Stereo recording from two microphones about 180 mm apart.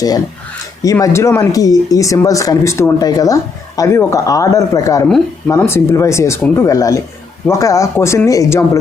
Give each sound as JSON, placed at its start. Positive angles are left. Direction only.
{"t": 0.8, "sound": "speech", "side_deg": 20}